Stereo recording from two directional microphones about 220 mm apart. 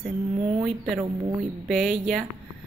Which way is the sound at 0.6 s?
20° right (ahead or behind).